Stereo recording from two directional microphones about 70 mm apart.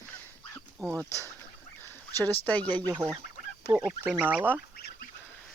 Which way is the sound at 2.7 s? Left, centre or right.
Right.